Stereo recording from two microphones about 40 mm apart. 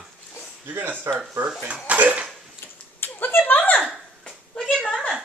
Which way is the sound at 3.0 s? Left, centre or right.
Left.